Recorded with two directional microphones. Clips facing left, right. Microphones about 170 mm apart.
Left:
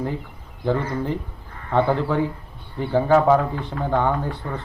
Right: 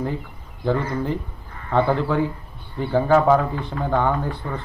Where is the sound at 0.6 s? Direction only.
15° left (ahead or behind).